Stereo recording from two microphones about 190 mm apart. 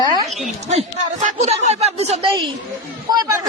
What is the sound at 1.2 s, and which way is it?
A woman's voice, 35° right (ahead or behind).